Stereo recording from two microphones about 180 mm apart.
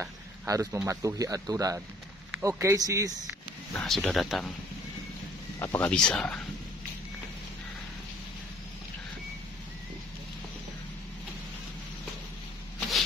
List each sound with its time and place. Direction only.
0.0 s speech: 15° right (ahead or behind)
3.7 s speech: 5° left (ahead or behind)
5.6 s speech: 10° left (ahead or behind)